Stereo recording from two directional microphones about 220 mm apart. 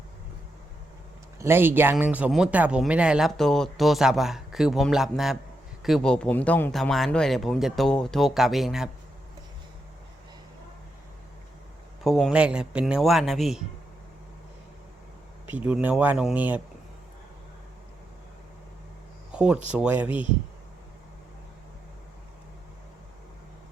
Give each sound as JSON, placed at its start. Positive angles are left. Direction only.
{"t": 1.4, "sound": "speech", "side_deg": -10}
{"t": 12.0, "sound": "speech", "side_deg": 0}
{"t": 15.5, "sound": "speech", "side_deg": -5}
{"t": 19.3, "sound": "a sound", "side_deg": -5}
{"t": 19.7, "sound": "speech", "side_deg": -5}
{"t": 20.1, "sound": "speech", "side_deg": 25}